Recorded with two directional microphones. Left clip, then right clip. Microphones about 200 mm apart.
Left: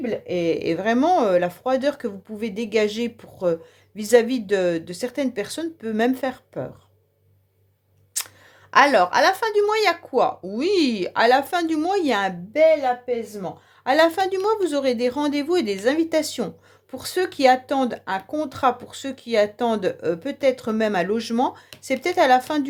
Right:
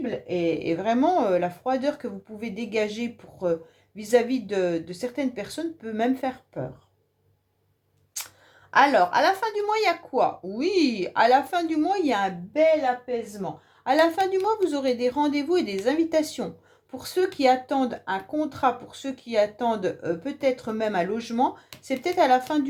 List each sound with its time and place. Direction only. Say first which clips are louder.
0.0 s speech: left 3 dB; 45° left (ahead or behind)
8.7 s speech: left 3 dB; 45° left (ahead or behind)